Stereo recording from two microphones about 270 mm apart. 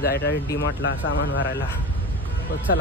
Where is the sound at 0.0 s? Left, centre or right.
Left.